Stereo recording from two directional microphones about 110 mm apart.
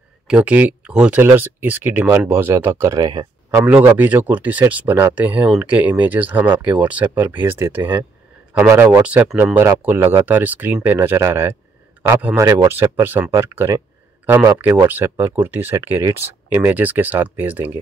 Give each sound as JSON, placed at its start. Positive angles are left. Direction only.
{"t": 0.3, "sound": "speech", "side_deg": -15}
{"t": 3.6, "sound": "speech", "side_deg": -15}
{"t": 9.0, "sound": "speech", "side_deg": -10}
{"t": 13.3, "sound": "speech", "side_deg": -35}
{"t": 14.2, "sound": "speech", "side_deg": -20}